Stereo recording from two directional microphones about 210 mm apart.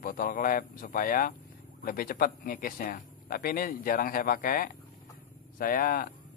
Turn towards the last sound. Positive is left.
turn(degrees=45)  # may be behind; listen again after turning